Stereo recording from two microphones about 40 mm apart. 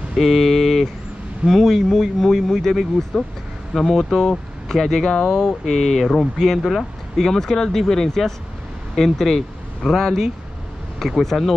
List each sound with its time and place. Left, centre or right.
0.2 s speech: centre
3.1 s speech: centre
5.1 s speech: centre
5.5 s speech: centre